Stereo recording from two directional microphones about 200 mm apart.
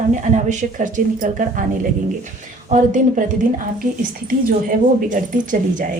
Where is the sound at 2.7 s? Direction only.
40° right (ahead or behind).